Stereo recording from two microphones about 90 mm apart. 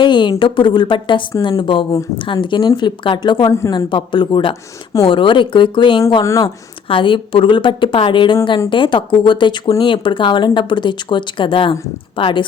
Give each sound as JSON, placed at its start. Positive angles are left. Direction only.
{"t": 0.0, "sound": "speech", "side_deg": 60}
{"t": 6.2, "sound": "speech", "side_deg": 35}
{"t": 6.8, "sound": "speech", "side_deg": 70}